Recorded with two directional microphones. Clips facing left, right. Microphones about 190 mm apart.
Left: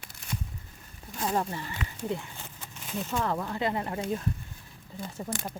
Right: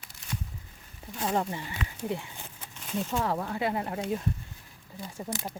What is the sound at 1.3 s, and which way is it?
Speech, 15° right (ahead or behind).